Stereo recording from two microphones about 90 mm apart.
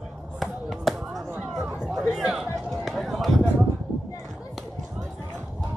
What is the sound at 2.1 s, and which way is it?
Music, centre (ahead or behind).